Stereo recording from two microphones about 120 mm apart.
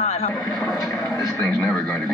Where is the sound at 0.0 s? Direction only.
65° left (ahead or behind).